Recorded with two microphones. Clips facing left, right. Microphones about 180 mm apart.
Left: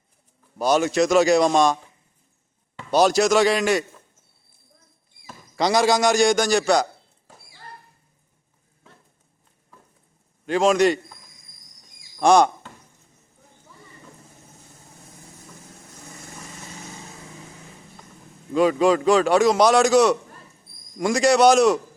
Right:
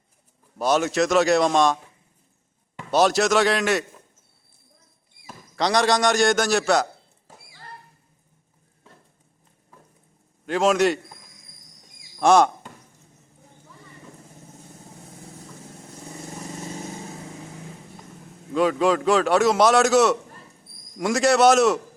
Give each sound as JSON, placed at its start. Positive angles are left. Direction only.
{"t": 0.6, "sound": "a man's voice", "side_deg": 0}
{"t": 2.9, "sound": "a man's voice", "side_deg": 0}
{"t": 5.5, "sound": "a man's voice", "side_deg": 5}
{"t": 10.4, "sound": "a man's voice", "side_deg": 0}
{"t": 12.2, "sound": "a man's voice", "side_deg": -5}
{"t": 18.5, "sound": "a man's voice", "side_deg": 0}